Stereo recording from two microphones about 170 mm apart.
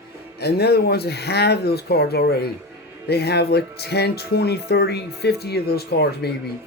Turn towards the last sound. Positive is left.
turn(degrees=70)  # may be behind; listen again after turning